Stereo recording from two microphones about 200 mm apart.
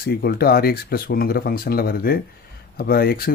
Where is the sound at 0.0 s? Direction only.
50° left (ahead or behind).